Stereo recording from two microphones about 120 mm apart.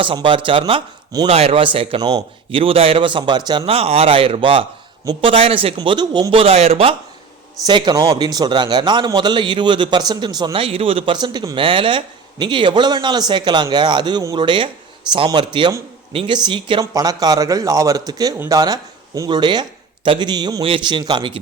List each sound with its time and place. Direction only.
0.0 s a man's voice: 45° right (ahead or behind)
1.3 s a man's voice: 60° right (ahead or behind)
2.0 s a man's voice: 35° right (ahead or behind)
2.6 s a man's voice: 50° right (ahead or behind); by 3.7 s 35° right (ahead or behind)
3.7 s a man's voice: 55° right (ahead or behind); by 6.4 s 35° right (ahead or behind)
6.4 s speech: 60° right (ahead or behind)
7.7 s a man's voice: 35° right (ahead or behind)
16.8 s a man's voice: 30° right (ahead or behind)